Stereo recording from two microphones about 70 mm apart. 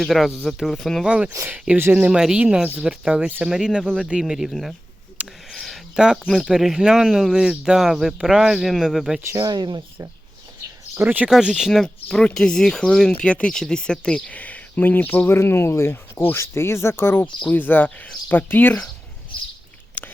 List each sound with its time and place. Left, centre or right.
0.0 s speech: centre
1.0 s speech: centre
2.0 s speech: centre
5.5 s a sound: centre
6.5 s speech: centre
9.2 s speech: right
9.5 s speech: right
10.9 s speech: right
11.3 s speech: centre
12.1 s speech: centre; by 15.4 s left
15.4 s speech: left
20.0 s a sound: left